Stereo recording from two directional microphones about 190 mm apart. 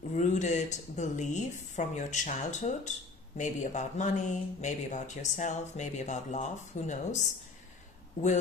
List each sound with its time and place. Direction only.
0.2 s speech: 40° left (ahead or behind)